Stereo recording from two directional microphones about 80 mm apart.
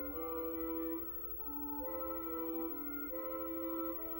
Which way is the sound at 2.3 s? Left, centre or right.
Left.